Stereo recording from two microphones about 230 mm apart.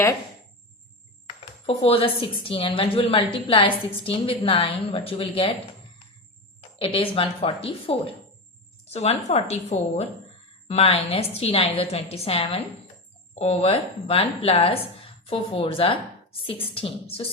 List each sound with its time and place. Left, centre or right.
1.6 s a woman's voice: left
6.6 s a woman's voice: left